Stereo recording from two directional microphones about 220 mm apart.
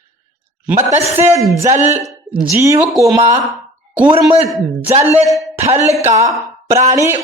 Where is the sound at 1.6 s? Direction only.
35° right (ahead or behind).